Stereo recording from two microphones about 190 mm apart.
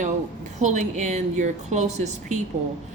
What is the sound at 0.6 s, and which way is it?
A woman's voice, 40° right (ahead or behind).